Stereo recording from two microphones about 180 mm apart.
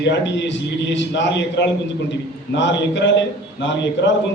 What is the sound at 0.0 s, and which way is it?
A man's voice, 75° left (ahead or behind).